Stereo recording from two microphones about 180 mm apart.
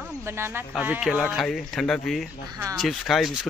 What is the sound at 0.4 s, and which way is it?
Speech, 10° right (ahead or behind).